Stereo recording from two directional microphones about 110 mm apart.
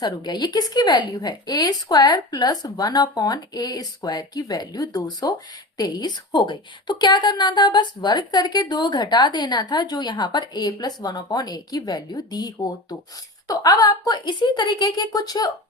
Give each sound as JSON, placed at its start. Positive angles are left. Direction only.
{"t": 0.0, "sound": "a woman's voice", "side_deg": 40}